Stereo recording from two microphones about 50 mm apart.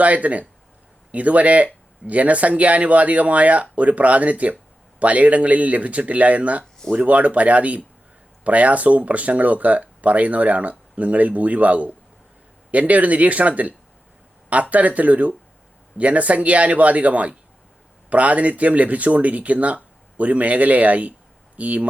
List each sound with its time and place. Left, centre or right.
0.0 s speech: right